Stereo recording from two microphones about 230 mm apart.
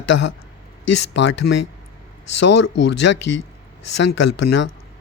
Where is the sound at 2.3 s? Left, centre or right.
Left.